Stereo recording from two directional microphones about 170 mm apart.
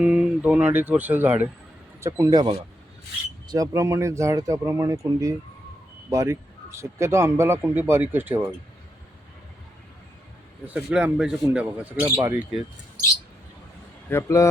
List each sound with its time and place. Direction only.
0.0 s speech: 5° right (ahead or behind); by 2.6 s 30° right (ahead or behind)
3.5 s speech: 20° right (ahead or behind)
10.7 s speech: 5° right (ahead or behind)
14.1 s a man's voice: 15° left (ahead or behind)